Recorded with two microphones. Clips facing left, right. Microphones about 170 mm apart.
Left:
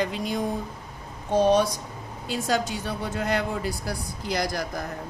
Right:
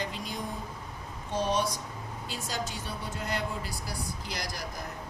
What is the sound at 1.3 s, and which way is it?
A woman's voice, 65° left (ahead or behind).